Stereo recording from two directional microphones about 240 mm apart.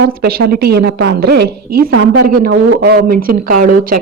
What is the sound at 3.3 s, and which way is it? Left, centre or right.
Speech, right.